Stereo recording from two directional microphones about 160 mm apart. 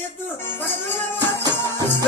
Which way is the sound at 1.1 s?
25° right (ahead or behind).